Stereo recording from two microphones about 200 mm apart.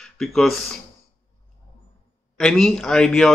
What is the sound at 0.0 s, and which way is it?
Speech, centre (ahead or behind).